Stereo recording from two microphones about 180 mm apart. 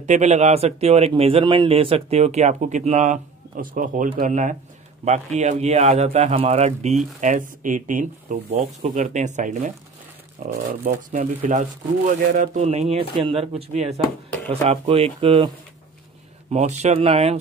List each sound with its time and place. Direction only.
0.0 s a man's voice: 40° right (ahead or behind)
16.5 s a man's voice: 40° right (ahead or behind)